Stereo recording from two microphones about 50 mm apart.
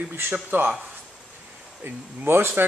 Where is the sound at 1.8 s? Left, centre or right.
Right.